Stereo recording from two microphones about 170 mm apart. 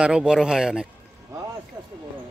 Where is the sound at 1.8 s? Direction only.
25° right (ahead or behind).